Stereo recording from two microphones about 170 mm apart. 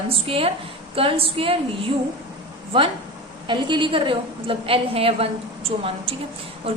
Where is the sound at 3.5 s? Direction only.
30° right (ahead or behind).